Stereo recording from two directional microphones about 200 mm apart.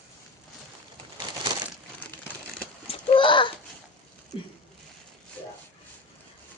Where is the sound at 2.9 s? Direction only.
25° left (ahead or behind).